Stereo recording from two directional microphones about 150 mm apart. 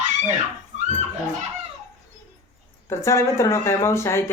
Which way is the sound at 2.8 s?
20° left (ahead or behind).